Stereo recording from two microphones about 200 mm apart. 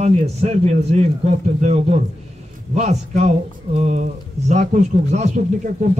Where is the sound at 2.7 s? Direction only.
35° right (ahead or behind).